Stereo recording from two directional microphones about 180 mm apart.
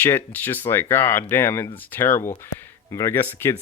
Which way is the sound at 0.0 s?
10° left (ahead or behind).